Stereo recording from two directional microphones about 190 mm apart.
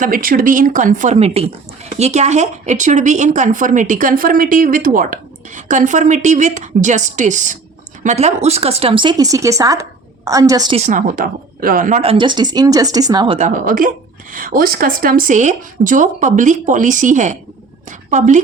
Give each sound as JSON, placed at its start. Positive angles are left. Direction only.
{"t": 0.0, "sound": "a woman's voice", "side_deg": -50}
{"t": 10.8, "sound": "a woman's voice", "side_deg": -40}
{"t": 12.1, "sound": "a woman's voice", "side_deg": -25}
{"t": 13.4, "sound": "a woman's voice", "side_deg": -45}